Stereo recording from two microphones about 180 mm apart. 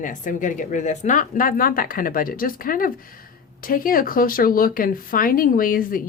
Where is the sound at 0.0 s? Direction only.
45° left (ahead or behind).